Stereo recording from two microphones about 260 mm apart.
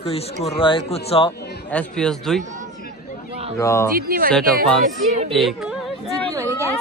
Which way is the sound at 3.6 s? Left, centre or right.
Centre.